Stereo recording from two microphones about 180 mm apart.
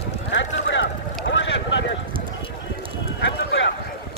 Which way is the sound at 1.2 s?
85° left.